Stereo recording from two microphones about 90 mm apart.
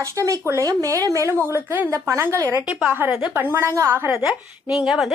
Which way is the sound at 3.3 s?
25° right (ahead or behind).